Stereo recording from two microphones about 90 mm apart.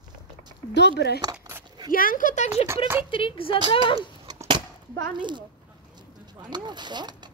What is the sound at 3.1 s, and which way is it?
A woman's voice, 80° left.